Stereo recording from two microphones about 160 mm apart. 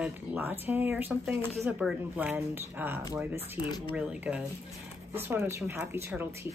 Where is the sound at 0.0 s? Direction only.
10° right (ahead or behind).